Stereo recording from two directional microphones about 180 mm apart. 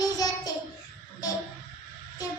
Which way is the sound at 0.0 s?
20° left (ahead or behind).